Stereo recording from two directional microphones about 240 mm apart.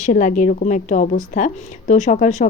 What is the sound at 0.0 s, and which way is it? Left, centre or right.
A woman's voice, left.